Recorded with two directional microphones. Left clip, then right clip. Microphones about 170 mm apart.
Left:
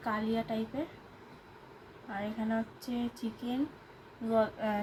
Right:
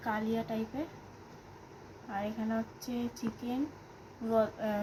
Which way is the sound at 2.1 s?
Centre (ahead or behind).